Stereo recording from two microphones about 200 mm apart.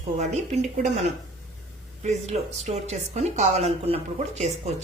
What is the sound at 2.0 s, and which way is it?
A woman's voice, 35° right (ahead or behind).